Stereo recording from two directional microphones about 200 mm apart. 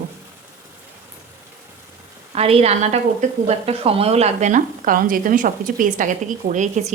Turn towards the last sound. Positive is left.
turn(degrees=-35)  # may be behind; listen again after turning